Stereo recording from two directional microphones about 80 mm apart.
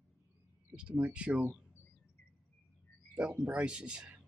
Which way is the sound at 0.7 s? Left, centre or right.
Centre.